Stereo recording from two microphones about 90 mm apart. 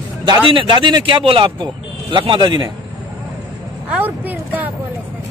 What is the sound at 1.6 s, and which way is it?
Speech, 60° right (ahead or behind).